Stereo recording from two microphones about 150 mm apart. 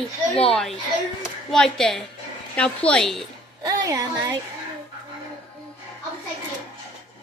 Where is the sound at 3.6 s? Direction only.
25° right (ahead or behind).